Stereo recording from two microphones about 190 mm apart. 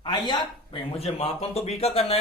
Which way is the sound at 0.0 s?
25° left (ahead or behind).